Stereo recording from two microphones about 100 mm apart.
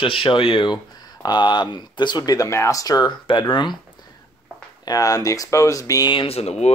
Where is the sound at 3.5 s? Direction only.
50° left (ahead or behind).